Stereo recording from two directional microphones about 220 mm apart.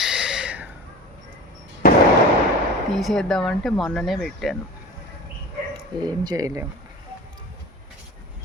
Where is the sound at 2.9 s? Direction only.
Centre (ahead or behind).